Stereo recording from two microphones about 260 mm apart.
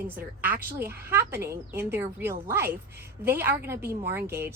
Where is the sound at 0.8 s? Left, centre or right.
Centre.